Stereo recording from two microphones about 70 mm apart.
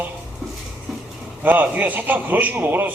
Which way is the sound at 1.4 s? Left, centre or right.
Right.